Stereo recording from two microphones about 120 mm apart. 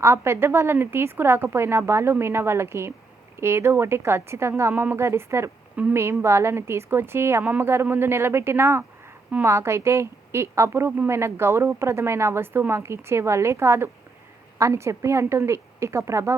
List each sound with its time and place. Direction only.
0.0 s speech: 20° right (ahead or behind)